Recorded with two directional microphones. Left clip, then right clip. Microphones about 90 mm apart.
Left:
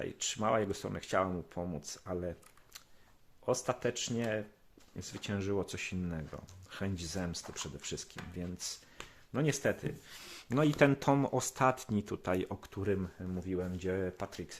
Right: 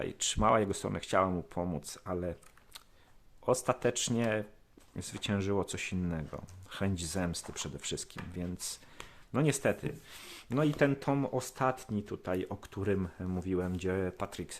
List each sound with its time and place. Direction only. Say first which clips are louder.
0.0 s speech: right 5 dB; 55° right (ahead or behind)
3.4 s speech: right 4 dB; 40° right (ahead or behind); by 8.1 s 60° right (ahead or behind)
8.1 s speech: right 2 dB; 35° right (ahead or behind)
9.0 s a sound: right 4 dB; 60° right (ahead or behind)
10.5 s speech: left 1 dB; 5° left (ahead or behind)
12.5 s speech: right 2 dB; 25° right (ahead or behind)
13.7 s speech: right 2 dB; 65° right (ahead or behind); by 14.5 s 45° right (ahead or behind)